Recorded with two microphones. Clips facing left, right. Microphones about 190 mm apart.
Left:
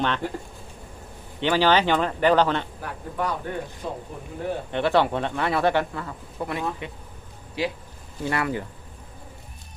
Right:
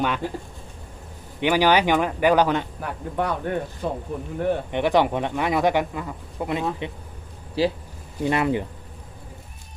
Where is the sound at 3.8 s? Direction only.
60° right (ahead or behind).